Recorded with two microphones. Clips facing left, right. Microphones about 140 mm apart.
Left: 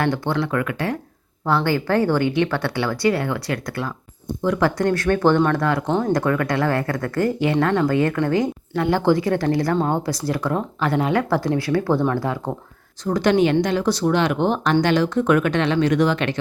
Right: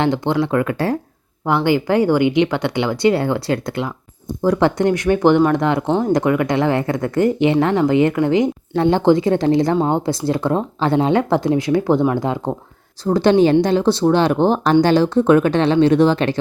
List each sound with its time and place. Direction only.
0.0 s speech: 20° right (ahead or behind)
1.5 s speech: 15° right (ahead or behind); by 16.4 s 30° right (ahead or behind)